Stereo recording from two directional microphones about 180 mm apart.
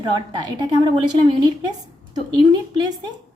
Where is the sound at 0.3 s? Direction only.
20° right (ahead or behind).